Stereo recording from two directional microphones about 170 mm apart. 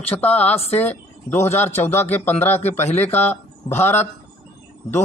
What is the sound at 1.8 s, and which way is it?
Speech, 10° left (ahead or behind).